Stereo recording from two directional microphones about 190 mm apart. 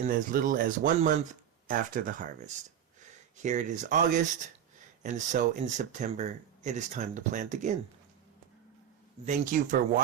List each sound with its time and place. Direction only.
0.0 s speech: 50° right (ahead or behind)
9.2 s speech: 40° right (ahead or behind)